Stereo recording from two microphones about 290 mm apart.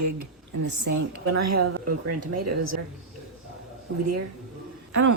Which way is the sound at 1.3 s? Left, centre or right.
Right.